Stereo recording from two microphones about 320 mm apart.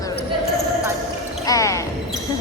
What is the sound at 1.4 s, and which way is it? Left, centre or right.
Basketball bounce, centre.